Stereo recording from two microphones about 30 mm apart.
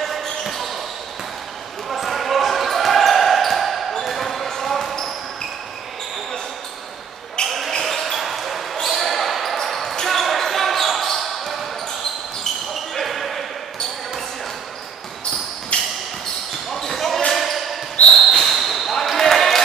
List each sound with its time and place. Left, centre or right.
0.4 s basketball bounce: centre
1.9 s basketball bounce: centre
7.4 s basketball bounce: centre
12.9 s basketball bounce: centre
15.7 s a sound: left
16.7 s basketball bounce: centre